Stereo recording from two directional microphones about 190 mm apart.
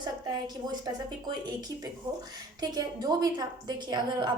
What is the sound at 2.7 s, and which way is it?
A woman's voice, 20° right (ahead or behind).